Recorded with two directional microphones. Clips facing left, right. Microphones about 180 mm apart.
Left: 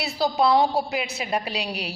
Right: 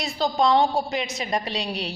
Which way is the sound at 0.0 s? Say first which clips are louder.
Even; 5° left (ahead or behind).